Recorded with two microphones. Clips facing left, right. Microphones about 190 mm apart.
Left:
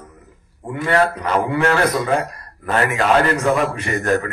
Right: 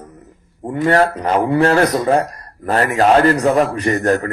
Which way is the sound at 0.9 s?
40° right (ahead or behind).